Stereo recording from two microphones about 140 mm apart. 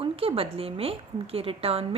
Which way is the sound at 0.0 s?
40° right (ahead or behind).